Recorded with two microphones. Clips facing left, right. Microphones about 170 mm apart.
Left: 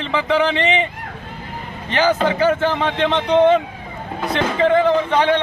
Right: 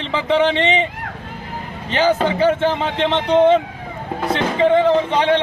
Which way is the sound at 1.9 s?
25° right (ahead or behind).